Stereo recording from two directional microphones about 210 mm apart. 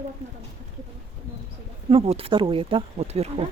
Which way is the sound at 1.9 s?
25° right (ahead or behind).